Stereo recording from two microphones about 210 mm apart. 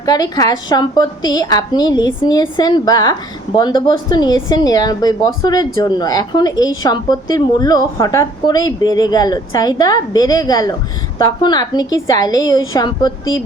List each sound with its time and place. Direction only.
0.0 s a woman's voice: 15° left (ahead or behind)